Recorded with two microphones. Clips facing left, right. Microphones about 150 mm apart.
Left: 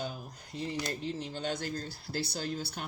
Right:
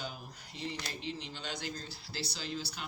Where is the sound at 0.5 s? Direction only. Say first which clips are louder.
Left 6 dB; 45° left (ahead or behind).